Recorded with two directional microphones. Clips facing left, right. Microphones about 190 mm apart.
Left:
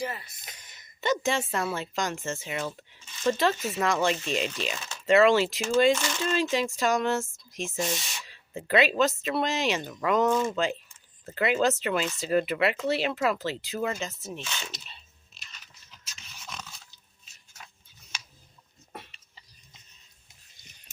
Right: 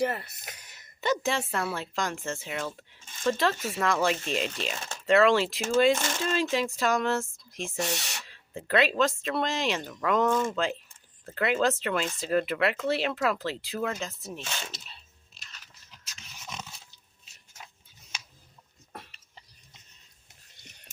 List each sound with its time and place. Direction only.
0.0 s speech: 60° right (ahead or behind)
1.0 s speech: centre (ahead or behind)
7.8 s speech: 70° right (ahead or behind)
8.2 s speech: 5° left (ahead or behind)
14.8 s a sound: centre (ahead or behind)
16.5 s dog: 20° right (ahead or behind)
20.6 s a sound: 65° right (ahead or behind)